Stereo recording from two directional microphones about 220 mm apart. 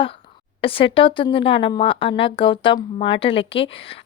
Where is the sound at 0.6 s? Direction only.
25° left (ahead or behind).